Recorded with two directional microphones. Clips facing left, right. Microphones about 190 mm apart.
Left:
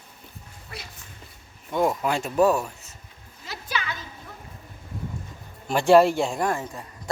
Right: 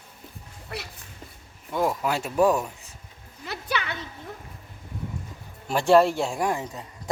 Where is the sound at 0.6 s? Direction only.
65° right (ahead or behind).